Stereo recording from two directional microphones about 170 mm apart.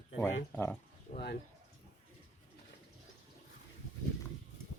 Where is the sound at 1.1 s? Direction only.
35° left (ahead or behind).